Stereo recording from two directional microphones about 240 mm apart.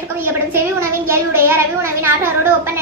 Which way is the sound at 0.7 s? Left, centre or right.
Centre.